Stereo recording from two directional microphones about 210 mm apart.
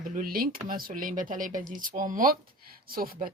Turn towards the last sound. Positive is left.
turn(degrees=-45)  # may be behind; listen again after turning